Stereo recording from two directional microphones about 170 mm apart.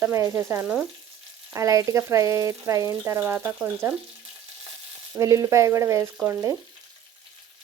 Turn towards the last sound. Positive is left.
turn(degrees=-15)  # may be behind; listen again after turning